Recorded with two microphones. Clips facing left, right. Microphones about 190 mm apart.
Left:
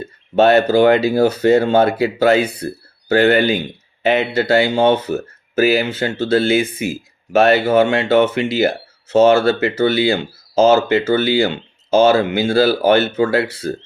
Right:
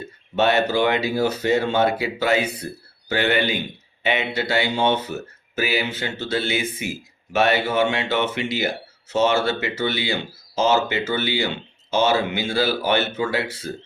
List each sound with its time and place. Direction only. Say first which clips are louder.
0.3 s speech: left 7 dB; 50° left (ahead or behind)
6.2 s speech: left 10 dB; 35° left (ahead or behind)
6.5 s speech: left 9 dB; 50° left (ahead or behind)